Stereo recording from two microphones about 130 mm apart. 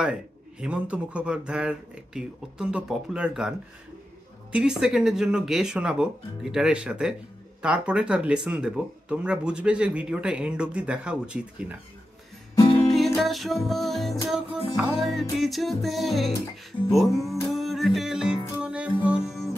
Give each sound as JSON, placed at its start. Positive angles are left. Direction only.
{"t": 0.0, "sound": "speech", "side_deg": -5}
{"t": 12.5, "sound": "music", "side_deg": 40}
{"t": 13.2, "sound": "speech", "side_deg": 0}
{"t": 16.7, "sound": "music", "side_deg": 35}
{"t": 17.3, "sound": "speech", "side_deg": 0}
{"t": 18.6, "sound": "music", "side_deg": -10}